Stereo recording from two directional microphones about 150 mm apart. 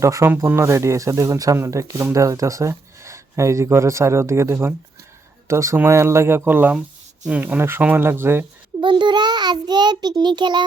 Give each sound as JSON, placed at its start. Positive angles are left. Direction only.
{"t": 0.0, "sound": "speech", "side_deg": -20}
{"t": 8.8, "sound": "speech", "side_deg": -30}